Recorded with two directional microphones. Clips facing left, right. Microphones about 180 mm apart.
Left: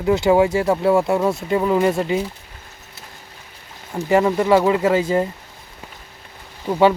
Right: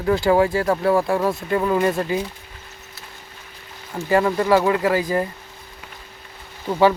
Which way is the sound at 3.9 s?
20° left (ahead or behind).